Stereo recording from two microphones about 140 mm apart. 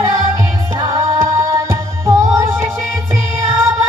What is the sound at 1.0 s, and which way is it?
Music, 20° right (ahead or behind).